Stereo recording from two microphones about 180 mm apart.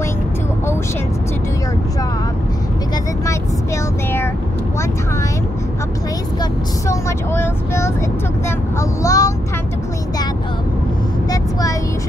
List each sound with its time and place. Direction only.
3.3 s vehicle: 15° left (ahead or behind)
6.9 s speech: 15° left (ahead or behind)